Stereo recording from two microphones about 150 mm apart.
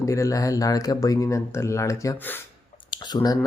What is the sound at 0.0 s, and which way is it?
Speech, 20° left (ahead or behind).